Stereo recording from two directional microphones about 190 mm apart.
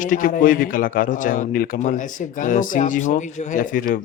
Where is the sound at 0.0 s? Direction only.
45° left (ahead or behind).